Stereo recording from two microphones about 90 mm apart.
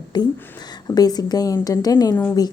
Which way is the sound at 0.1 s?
55° left (ahead or behind).